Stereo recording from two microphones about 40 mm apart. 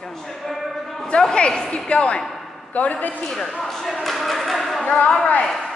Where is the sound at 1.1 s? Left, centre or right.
Left.